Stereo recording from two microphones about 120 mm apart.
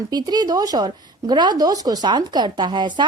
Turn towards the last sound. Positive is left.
turn(degrees=-40)  # may be behind; listen again after turning